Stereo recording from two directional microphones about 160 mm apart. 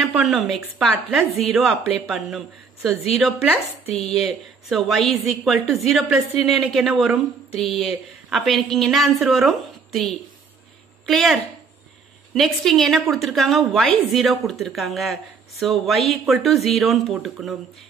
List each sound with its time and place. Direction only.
0.0 s a woman's voice: centre (ahead or behind)
12.4 s a woman's voice: centre (ahead or behind)